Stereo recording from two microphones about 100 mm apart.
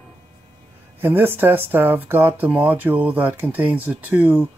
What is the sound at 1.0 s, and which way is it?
Speech, 20° right (ahead or behind).